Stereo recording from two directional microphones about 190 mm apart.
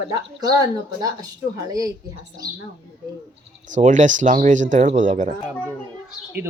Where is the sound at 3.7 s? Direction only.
40° right (ahead or behind).